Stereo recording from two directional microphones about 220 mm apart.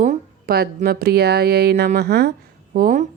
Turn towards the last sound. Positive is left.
turn(degrees=-35)  # may be behind; listen again after turning